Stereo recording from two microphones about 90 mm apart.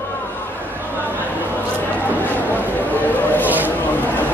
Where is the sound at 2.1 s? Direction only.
20° left (ahead or behind).